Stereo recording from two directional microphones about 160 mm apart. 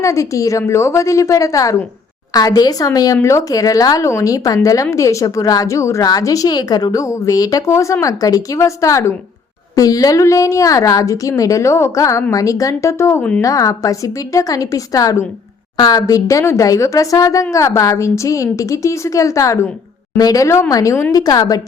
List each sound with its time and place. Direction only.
0.0 s speech: 20° left (ahead or behind)